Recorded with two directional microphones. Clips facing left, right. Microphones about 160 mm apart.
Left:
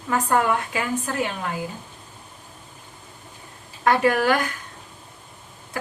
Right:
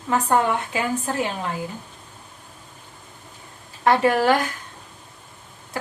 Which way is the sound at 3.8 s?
30° right (ahead or behind).